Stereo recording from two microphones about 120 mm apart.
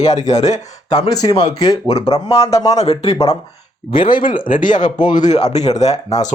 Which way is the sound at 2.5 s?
30° left (ahead or behind).